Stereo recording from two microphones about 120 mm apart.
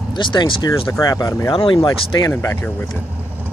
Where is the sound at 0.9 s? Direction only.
30° left (ahead or behind).